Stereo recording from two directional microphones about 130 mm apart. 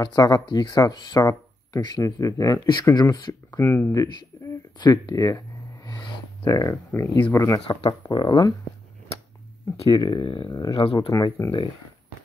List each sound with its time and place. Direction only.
0.0 s speech: 30° left (ahead or behind)
3.5 s speech: 15° left (ahead or behind)
3.9 s speech: 25° left (ahead or behind)
8.0 s speech: 35° left (ahead or behind)
9.8 s speech: 35° left (ahead or behind)